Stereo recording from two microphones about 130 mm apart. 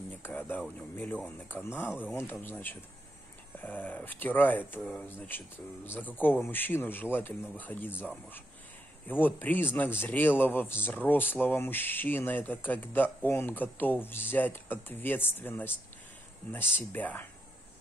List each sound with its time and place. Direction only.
0.1 s speech: 15° left (ahead or behind)